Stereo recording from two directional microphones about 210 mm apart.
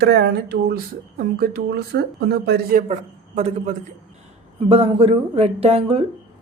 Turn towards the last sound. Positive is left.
turn(degrees=-30)  # may be behind; listen again after turning